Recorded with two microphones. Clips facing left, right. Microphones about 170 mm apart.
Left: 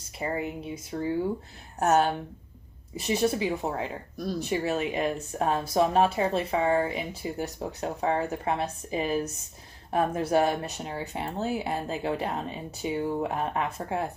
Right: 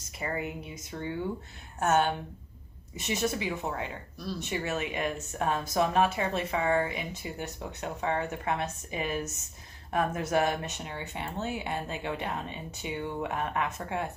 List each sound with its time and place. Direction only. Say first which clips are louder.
0.2 s speech: left 3 dB; 30° left (ahead or behind)